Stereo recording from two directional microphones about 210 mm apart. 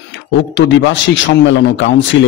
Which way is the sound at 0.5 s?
60° left (ahead or behind).